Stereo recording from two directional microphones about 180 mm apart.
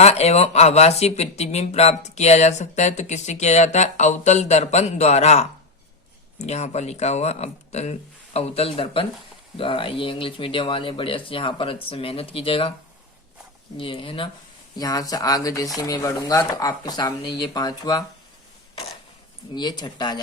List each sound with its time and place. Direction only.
0.0 s speech: 35° left (ahead or behind)
13.7 s speech: 30° left (ahead or behind)
19.5 s speech: 25° left (ahead or behind)